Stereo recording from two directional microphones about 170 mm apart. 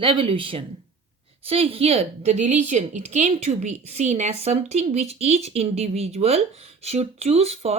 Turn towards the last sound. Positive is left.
turn(degrees=-35)  # may be behind; listen again after turning